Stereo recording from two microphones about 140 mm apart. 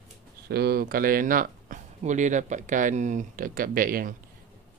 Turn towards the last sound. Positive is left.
turn(degrees=-90)